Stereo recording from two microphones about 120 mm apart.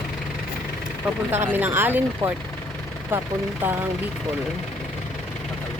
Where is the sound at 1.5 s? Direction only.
15° right (ahead or behind).